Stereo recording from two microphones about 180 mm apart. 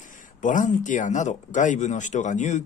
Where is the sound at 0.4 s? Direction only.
45° left (ahead or behind).